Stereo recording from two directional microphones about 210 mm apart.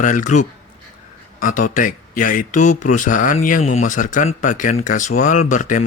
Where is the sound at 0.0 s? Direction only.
35° left (ahead or behind).